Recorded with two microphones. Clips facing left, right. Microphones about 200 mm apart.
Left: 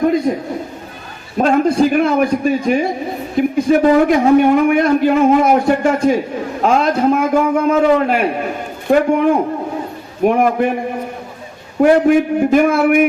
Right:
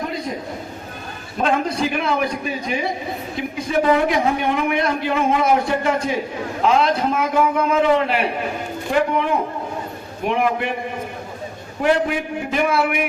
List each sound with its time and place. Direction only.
0.3 s a sound: 50° left (ahead or behind)
1.4 s a man's voice: 45° left (ahead or behind)
11.8 s a man's voice: 45° left (ahead or behind)